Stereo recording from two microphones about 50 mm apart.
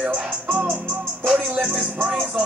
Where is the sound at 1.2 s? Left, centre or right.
Centre.